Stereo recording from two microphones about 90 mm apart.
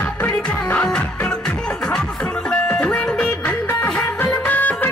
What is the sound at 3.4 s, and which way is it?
Music, 25° left (ahead or behind).